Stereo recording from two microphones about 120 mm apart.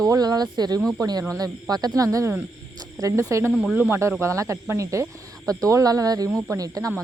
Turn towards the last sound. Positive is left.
turn(degrees=-30)  # may be behind; listen again after turning